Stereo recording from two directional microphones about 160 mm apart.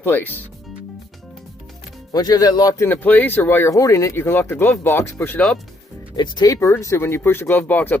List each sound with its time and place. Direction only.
0.0 s a man's voice: 10° left (ahead or behind)
2.1 s a man's voice: 25° left (ahead or behind); by 5.5 s 10° left (ahead or behind)
6.3 s a man's voice: 20° left (ahead or behind)